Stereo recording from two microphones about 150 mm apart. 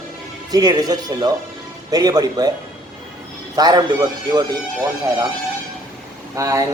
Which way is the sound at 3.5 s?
25° right (ahead or behind).